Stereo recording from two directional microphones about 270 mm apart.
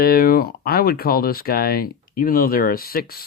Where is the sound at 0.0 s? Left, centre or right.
Left.